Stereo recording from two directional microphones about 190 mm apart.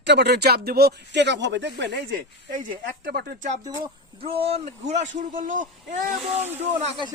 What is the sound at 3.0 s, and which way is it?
Speech, 55° right (ahead or behind).